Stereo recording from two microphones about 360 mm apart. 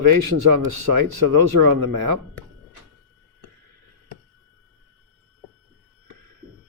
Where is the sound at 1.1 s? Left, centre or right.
Right.